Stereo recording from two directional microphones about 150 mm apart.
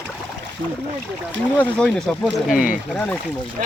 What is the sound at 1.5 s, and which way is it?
Speech, 5° left (ahead or behind).